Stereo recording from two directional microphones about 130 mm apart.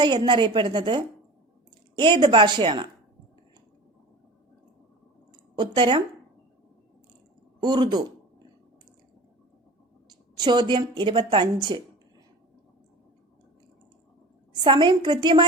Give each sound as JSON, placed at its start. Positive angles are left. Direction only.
{"t": 0.0, "sound": "a woman's voice", "side_deg": -35}
{"t": 5.5, "sound": "a woman's voice", "side_deg": -40}
{"t": 7.6, "sound": "a woman's voice", "side_deg": -35}
{"t": 10.1, "sound": "a woman's voice", "side_deg": -35}
{"t": 14.5, "sound": "a woman's voice", "side_deg": -35}